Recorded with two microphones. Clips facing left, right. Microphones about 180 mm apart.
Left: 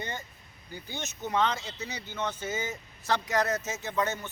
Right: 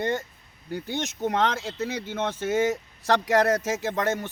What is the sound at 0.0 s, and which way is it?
Speech, 75° right (ahead or behind).